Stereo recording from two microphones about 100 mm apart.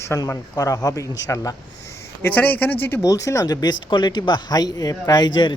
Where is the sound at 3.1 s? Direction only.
35° left (ahead or behind).